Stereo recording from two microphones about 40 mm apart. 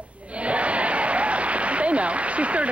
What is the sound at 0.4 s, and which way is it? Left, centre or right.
Speech, right.